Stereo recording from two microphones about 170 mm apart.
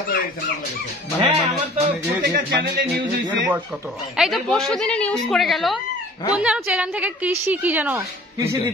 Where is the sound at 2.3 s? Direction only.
75° right (ahead or behind).